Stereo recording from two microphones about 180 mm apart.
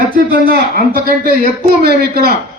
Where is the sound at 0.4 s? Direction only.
55° right (ahead or behind).